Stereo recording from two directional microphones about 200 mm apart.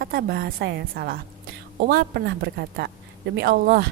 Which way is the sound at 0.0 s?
50° right (ahead or behind).